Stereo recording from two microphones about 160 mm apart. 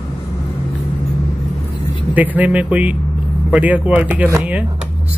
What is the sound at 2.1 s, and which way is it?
Speech, 10° right (ahead or behind).